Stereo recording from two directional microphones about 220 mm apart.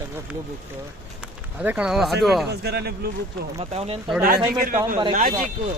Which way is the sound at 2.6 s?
45° right (ahead or behind).